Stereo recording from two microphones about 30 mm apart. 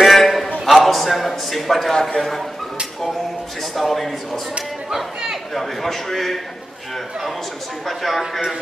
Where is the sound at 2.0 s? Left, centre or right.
Left.